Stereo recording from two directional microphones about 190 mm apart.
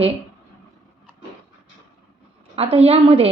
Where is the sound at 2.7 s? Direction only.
30° right (ahead or behind).